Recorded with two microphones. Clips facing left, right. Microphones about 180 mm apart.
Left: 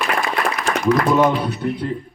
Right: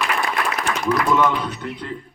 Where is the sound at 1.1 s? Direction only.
30° left (ahead or behind).